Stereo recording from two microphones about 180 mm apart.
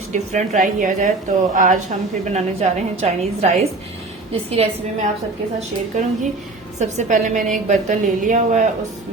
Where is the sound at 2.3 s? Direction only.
40° right (ahead or behind).